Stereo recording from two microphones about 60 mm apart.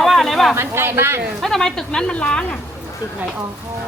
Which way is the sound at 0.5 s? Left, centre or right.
Right.